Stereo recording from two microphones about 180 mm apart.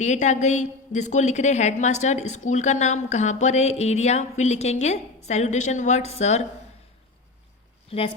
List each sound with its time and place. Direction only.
0.0 s a woman's voice: 40° left (ahead or behind)
7.9 s speech: 30° left (ahead or behind)